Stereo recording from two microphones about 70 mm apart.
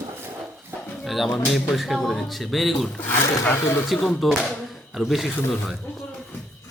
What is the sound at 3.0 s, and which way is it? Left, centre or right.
Speech, left.